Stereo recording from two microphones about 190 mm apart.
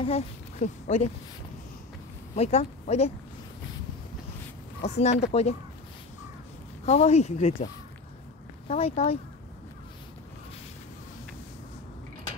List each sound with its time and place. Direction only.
0.0 s a child's voice: 35° left (ahead or behind)
2.3 s speech: 35° left (ahead or behind)
4.8 s speech: 35° left (ahead or behind)
6.9 s speech: 35° left (ahead or behind)
8.6 s speech: 30° left (ahead or behind)